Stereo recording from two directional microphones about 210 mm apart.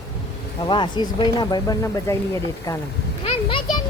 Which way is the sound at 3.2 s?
25° left (ahead or behind).